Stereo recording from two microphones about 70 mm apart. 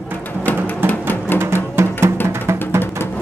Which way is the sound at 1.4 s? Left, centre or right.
Right.